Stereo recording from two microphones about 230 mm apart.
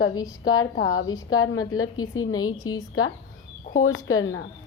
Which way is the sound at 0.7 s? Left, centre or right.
Left.